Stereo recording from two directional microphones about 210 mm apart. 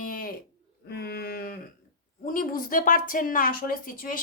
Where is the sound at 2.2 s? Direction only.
40° left (ahead or behind).